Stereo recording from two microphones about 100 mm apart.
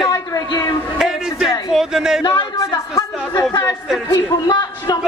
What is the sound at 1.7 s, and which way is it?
Speech, 5° right (ahead or behind).